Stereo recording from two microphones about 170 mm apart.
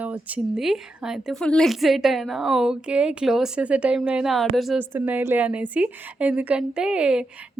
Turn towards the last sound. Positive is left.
turn(degrees=-5)  # may be behind; listen again after turning